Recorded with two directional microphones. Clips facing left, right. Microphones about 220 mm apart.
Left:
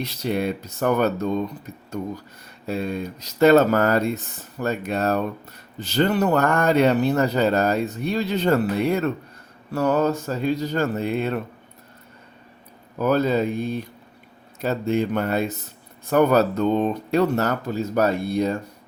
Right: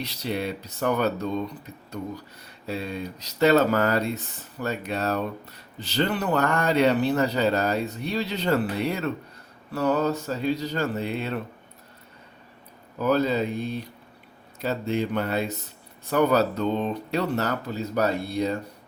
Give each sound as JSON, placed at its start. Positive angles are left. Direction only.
{"t": 0.0, "sound": "speech", "side_deg": 50}
{"t": 2.6, "sound": "speech", "side_deg": 45}
{"t": 13.0, "sound": "speech", "side_deg": 50}